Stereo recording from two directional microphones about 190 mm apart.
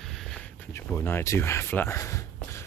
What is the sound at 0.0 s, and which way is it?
Speech, centre (ahead or behind).